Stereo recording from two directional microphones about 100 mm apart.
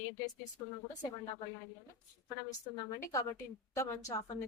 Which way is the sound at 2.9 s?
30° left (ahead or behind).